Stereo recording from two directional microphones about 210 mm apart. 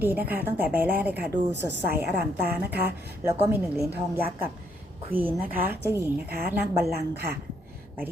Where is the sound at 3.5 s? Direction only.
10° right (ahead or behind).